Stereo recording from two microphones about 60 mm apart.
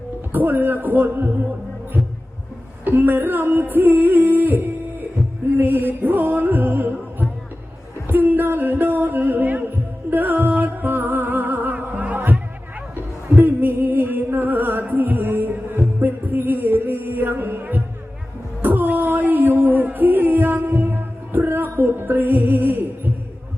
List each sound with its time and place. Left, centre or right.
0.3 s music: right
2.8 s singing: right
5.5 s music: right
18.6 s a sound: right